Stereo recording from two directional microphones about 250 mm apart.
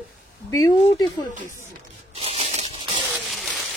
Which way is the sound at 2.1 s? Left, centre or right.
Right.